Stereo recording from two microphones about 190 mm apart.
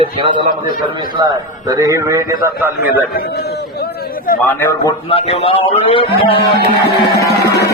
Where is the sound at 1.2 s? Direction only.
20° right (ahead or behind).